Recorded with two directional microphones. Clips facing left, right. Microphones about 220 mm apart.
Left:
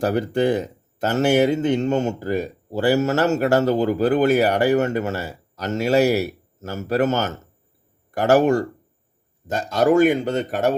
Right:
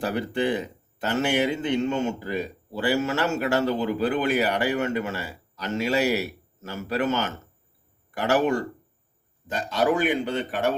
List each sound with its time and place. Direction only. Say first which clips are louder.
0.0 s speech: left 6 dB; 45° left (ahead or behind)